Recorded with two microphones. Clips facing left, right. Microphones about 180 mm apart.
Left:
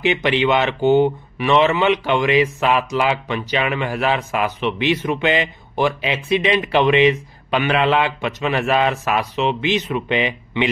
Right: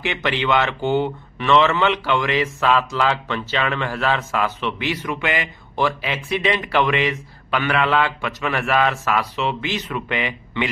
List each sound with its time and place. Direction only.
0.0 s speech: 20° left (ahead or behind)